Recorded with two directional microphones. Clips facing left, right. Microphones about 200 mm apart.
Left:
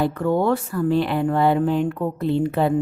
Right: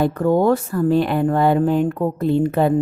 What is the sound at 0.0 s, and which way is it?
Speech, 40° right (ahead or behind).